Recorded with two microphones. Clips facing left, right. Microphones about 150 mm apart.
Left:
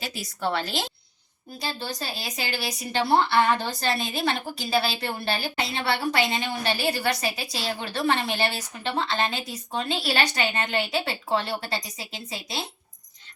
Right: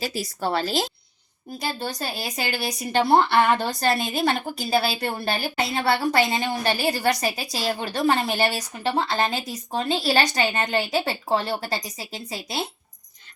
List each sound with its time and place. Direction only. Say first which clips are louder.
0.0 s a woman's voice: right 3 dB; 40° right (ahead or behind)
1.5 s a woman's voice: right 3 dB; 55° right (ahead or behind)